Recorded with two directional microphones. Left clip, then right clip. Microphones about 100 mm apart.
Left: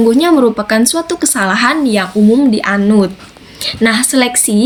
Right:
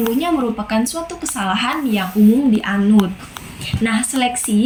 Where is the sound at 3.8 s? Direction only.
35° left (ahead or behind).